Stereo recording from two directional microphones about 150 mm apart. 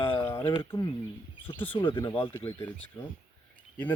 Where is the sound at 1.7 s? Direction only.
30° left (ahead or behind).